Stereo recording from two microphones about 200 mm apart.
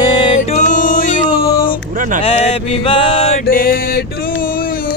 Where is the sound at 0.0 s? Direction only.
25° left (ahead or behind).